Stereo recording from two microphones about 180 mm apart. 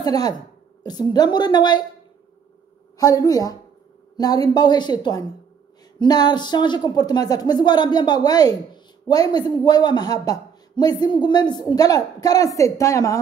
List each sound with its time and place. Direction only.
0.0 s a man's voice: 20° left (ahead or behind)
3.0 s a man's voice: 20° left (ahead or behind)